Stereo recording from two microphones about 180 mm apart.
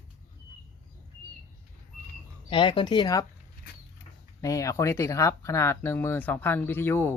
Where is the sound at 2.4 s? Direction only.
30° left (ahead or behind).